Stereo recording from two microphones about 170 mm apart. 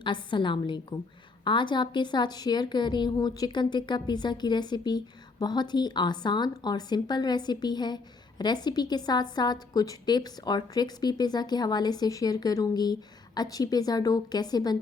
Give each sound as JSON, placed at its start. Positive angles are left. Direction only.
{"t": 0.0, "sound": "a woman's voice", "side_deg": 25}